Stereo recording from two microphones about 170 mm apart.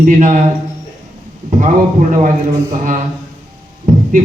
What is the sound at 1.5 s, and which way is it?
Speech, 45° right (ahead or behind).